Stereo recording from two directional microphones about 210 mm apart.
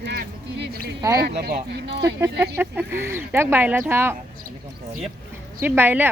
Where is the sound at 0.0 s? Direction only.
50° right (ahead or behind).